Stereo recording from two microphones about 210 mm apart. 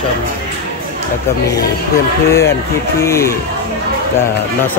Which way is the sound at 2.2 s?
15° left (ahead or behind).